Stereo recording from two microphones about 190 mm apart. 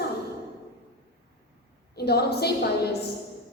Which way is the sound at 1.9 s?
55° left (ahead or behind).